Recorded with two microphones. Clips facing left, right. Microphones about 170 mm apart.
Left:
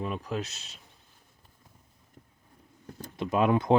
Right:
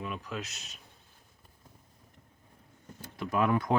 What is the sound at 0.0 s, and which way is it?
Speech, 35° left (ahead or behind).